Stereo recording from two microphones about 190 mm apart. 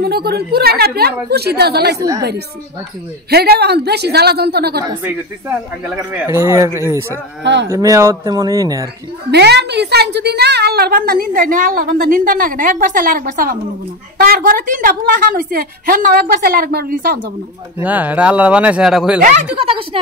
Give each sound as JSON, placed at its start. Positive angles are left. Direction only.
{"t": 0.0, "sound": "a woman's voice", "side_deg": -55}
{"t": 2.0, "sound": "a woman's voice", "side_deg": -20}
{"t": 3.3, "sound": "a woman's voice", "side_deg": -55}
{"t": 5.0, "sound": "speech", "side_deg": -10}
{"t": 9.3, "sound": "a woman's voice", "side_deg": -60}
{"t": 17.8, "sound": "speech", "side_deg": -10}